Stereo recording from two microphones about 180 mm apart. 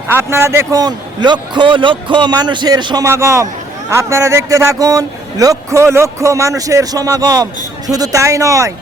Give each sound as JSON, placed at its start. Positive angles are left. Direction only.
{"t": 0.1, "sound": "a man's voice", "side_deg": -15}